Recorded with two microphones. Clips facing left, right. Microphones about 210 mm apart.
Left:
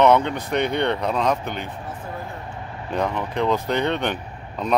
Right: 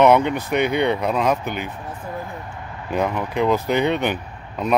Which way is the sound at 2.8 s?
5° right (ahead or behind).